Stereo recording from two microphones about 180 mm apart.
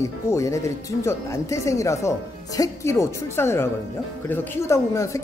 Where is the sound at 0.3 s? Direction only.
15° left (ahead or behind).